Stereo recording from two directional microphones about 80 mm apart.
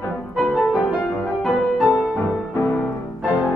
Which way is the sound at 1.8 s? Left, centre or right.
Centre.